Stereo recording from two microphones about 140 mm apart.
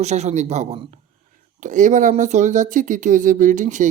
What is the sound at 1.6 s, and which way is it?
Speech, 65° right (ahead or behind).